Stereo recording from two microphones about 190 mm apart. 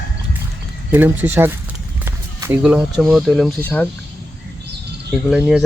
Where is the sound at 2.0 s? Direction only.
15° right (ahead or behind).